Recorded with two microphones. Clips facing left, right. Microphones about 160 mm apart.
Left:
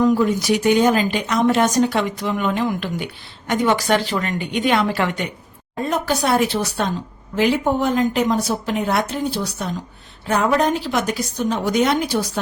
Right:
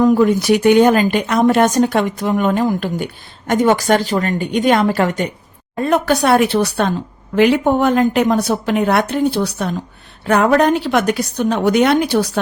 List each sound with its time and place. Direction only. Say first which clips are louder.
0.0 s speech: right 4 dB; 55° right (ahead or behind); by 5.3 s 40° right (ahead or behind)
5.8 s a woman's voice: right 6 dB; 65° right (ahead or behind)